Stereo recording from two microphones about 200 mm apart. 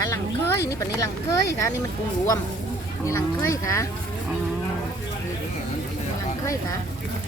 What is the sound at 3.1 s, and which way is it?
Speech, 15° left (ahead or behind).